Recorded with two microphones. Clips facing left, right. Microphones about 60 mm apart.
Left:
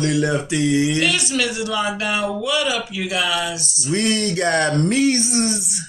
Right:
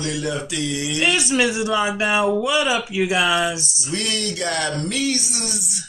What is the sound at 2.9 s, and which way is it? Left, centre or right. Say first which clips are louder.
Speech: right 5 dB; right.